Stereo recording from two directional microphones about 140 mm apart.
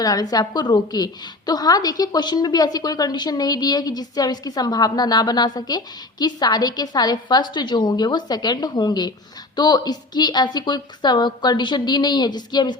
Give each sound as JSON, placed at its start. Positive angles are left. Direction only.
{"t": 0.0, "sound": "a woman's voice", "side_deg": 25}